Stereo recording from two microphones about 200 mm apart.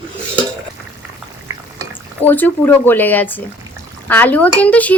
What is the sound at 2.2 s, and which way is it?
A woman's voice, 10° left (ahead or behind).